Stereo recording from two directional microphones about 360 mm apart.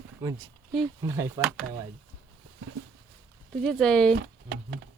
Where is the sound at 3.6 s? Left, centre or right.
Centre.